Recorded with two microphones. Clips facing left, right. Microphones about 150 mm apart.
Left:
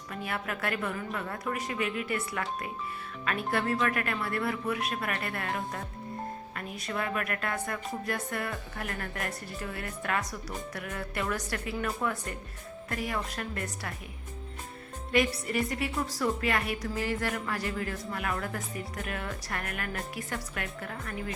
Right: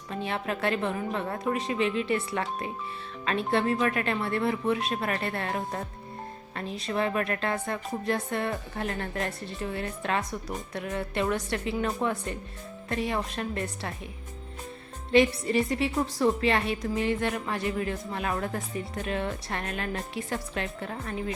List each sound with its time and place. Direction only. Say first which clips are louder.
0.1 s a woman's voice: right 4 dB; 25° right (ahead or behind)
15.1 s a woman's voice: right 6 dB; 25° right (ahead or behind)